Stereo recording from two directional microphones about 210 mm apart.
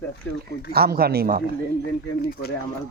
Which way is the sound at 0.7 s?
45° right (ahead or behind).